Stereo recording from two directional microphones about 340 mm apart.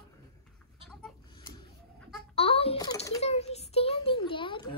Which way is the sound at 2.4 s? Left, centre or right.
Centre.